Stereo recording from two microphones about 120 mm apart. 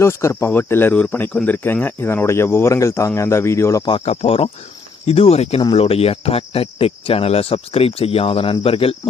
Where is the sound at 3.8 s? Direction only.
45° left (ahead or behind).